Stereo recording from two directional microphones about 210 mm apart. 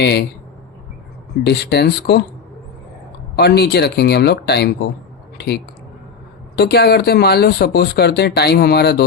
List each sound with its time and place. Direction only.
0.0 s speech: 50° left (ahead or behind)
1.5 s speech: 50° left (ahead or behind)
3.3 s speech: 50° left (ahead or behind)